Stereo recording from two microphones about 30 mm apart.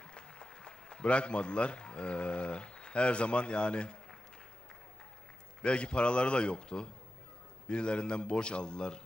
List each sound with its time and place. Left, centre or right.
0.0 s applause: left
1.0 s speech: left
5.6 s speech: left